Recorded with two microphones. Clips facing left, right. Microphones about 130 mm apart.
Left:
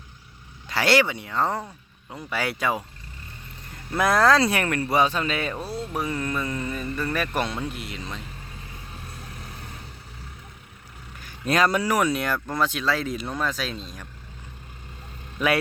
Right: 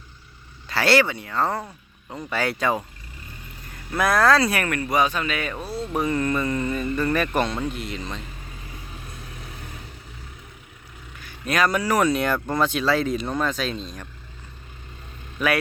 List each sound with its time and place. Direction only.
0.7 s speech: 15° left (ahead or behind)
3.7 s speech: 25° left (ahead or behind)
5.9 s speech: centre (ahead or behind)
9.0 s vehicle: 35° left (ahead or behind)
11.2 s vehicle: 40° left (ahead or behind)
11.5 s speech: 25° left (ahead or behind)
11.9 s speech: 10° left (ahead or behind)